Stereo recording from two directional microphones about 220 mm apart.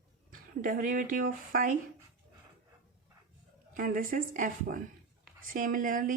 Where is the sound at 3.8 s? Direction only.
40° right (ahead or behind).